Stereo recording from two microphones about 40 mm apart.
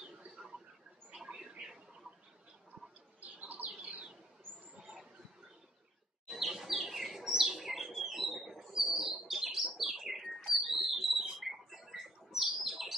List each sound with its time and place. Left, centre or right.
0.0 s a sound: right
1.2 s mouse: centre
3.2 s bird: right
6.2 s bird: centre